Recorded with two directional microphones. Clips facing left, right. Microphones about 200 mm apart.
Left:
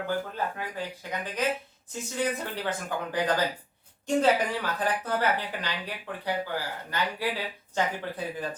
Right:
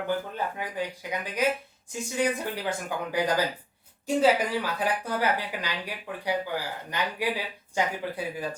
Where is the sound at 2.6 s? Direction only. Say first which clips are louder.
Right 1 dB; 10° right (ahead or behind).